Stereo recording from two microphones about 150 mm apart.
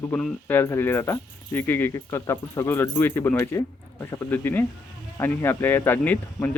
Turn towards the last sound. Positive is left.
turn(degrees=10)  # may be behind; listen again after turning